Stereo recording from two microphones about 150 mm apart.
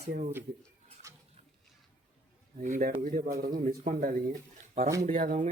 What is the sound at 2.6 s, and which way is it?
Speech, 60° right (ahead or behind).